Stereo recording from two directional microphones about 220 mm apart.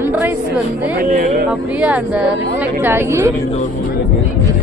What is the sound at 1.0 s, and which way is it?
Speech, 45° right (ahead or behind).